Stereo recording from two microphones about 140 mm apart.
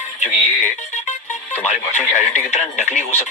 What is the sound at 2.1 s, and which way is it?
Speech, 55° left (ahead or behind).